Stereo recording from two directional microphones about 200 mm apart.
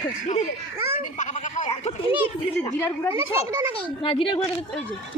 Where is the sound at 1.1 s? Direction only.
35° left (ahead or behind).